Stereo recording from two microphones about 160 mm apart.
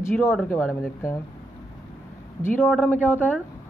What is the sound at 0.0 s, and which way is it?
Speech, 15° left (ahead or behind).